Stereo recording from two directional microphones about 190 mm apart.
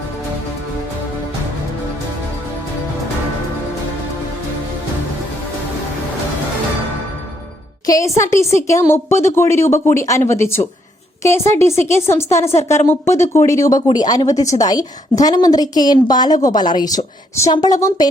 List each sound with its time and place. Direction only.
7.9 s a woman's voice: 15° left (ahead or behind)